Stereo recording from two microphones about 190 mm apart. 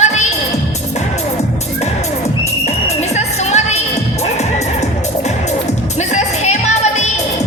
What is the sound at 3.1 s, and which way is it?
Music, 35° left (ahead or behind).